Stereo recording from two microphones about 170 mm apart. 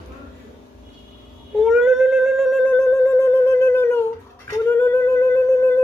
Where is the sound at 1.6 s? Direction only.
5° right (ahead or behind); by 4.0 s 15° left (ahead or behind).